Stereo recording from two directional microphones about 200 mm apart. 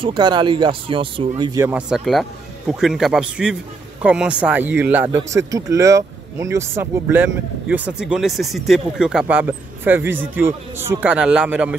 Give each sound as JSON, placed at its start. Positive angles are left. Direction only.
{"t": 0.0, "sound": "speech", "side_deg": -25}